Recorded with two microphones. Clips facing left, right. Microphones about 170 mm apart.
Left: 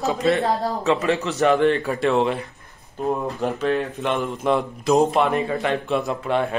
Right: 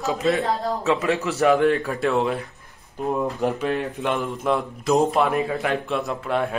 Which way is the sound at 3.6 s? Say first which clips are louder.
Left 2 dB; 15° right (ahead or behind).